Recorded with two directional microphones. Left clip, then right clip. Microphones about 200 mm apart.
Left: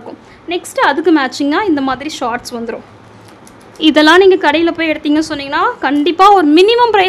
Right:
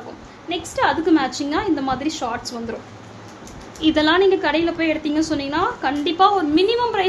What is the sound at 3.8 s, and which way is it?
A woman's voice, 50° left (ahead or behind).